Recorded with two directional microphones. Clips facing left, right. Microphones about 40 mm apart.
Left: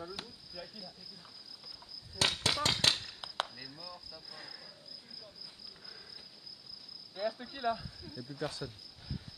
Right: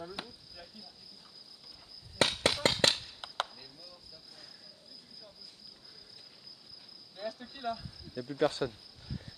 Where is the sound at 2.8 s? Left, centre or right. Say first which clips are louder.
Right 2 dB; right.